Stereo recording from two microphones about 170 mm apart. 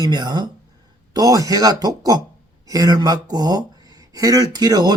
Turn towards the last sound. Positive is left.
turn(degrees=-25)  # may be behind; listen again after turning